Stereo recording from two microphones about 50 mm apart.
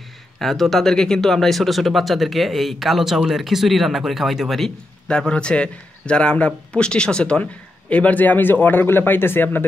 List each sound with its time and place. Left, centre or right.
0.4 s speech: centre
5.0 s a man's voice: centre
7.9 s a man's voice: left